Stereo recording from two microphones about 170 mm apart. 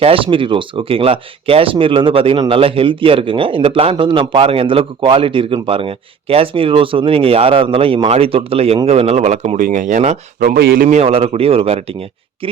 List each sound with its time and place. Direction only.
0.0 s speech: 30° right (ahead or behind); by 10.8 s 60° right (ahead or behind)
10.8 s speech: 35° right (ahead or behind)